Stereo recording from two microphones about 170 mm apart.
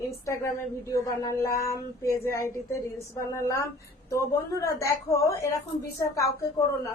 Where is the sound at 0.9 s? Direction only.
20° left (ahead or behind).